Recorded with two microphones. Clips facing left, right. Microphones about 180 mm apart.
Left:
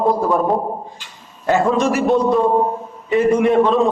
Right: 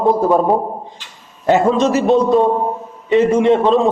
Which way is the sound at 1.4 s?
20° right (ahead or behind).